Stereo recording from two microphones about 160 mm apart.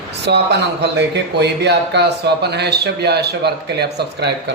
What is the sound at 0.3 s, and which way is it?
Speech, 90° right.